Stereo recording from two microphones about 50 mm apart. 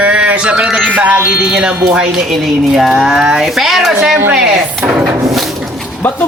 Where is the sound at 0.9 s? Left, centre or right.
Right.